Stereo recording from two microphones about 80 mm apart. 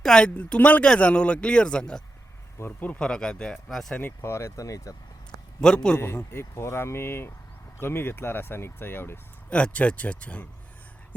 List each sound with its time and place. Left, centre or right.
0.0 s speech: centre
2.6 s speech: left; by 3.9 s centre
3.9 s speech: left
5.5 s speech: centre
6.3 s speech: left
9.5 s speech: centre